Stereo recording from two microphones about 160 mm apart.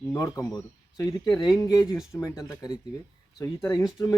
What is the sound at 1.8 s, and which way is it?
Speech, 5° right (ahead or behind).